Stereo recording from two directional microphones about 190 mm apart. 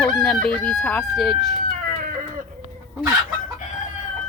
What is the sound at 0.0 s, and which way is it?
Crowing, centre (ahead or behind).